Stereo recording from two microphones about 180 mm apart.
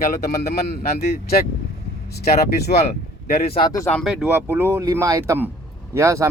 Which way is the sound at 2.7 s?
45° left (ahead or behind).